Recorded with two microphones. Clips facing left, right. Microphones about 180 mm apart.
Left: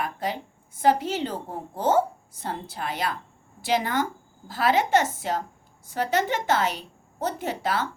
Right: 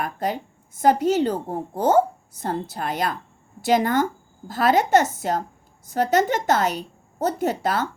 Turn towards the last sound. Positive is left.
turn(degrees=-45)  # may be behind; listen again after turning